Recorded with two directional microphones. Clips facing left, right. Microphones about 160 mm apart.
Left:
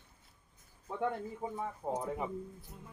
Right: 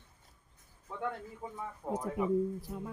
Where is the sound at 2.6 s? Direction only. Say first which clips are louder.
Right 12 dB; 90° right.